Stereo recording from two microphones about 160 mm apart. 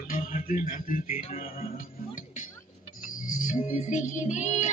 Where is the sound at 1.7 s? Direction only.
60° left (ahead or behind).